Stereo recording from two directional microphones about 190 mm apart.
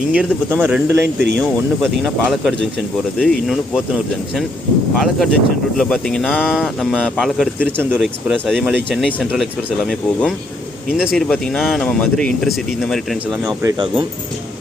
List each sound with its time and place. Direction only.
0.1 s speech: 5° right (ahead or behind)
1.0 s speech: 60° right (ahead or behind)
1.4 s speech: centre (ahead or behind)
7.8 s speech: 10° right (ahead or behind)
8.0 s speech: centre (ahead or behind)
13.4 s speech: 15° right (ahead or behind)